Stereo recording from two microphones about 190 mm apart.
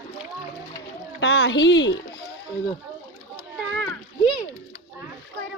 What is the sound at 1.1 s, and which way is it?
Speech, 90° left.